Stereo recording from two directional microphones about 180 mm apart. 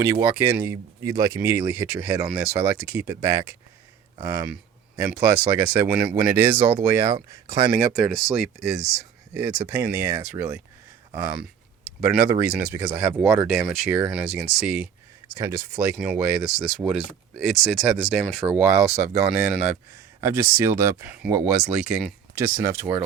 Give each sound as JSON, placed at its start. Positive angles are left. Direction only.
{"t": 0.0, "sound": "speech", "side_deg": -15}
{"t": 7.9, "sound": "speech", "side_deg": 0}
{"t": 22.4, "sound": "speech", "side_deg": -15}